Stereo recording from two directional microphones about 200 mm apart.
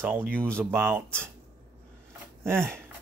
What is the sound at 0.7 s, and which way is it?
Speech, 10° right (ahead or behind).